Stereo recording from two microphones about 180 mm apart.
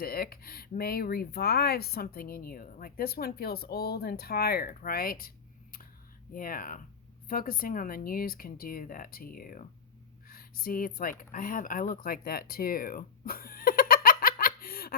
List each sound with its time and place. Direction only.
0.0 s speech: 55° left (ahead or behind)
6.3 s speech: 50° left (ahead or behind)